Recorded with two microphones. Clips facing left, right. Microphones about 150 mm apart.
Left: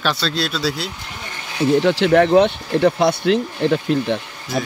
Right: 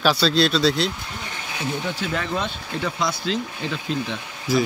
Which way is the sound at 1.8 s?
85° left.